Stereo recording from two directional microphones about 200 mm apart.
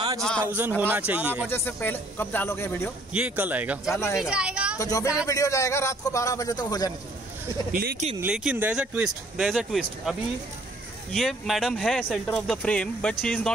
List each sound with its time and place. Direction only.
0.2 s speech: 5° left (ahead or behind)
0.5 s speech: 10° right (ahead or behind)
1.5 s a man's voice: 10° left (ahead or behind)
3.1 s speech: 5° right (ahead or behind)
3.9 s a man's voice: 15° left (ahead or behind)
4.2 s speech: 5° right (ahead or behind)
4.7 s a man's voice: 15° left (ahead or behind)
7.7 s speech: 45° right (ahead or behind)
8.2 s speech: 10° right (ahead or behind)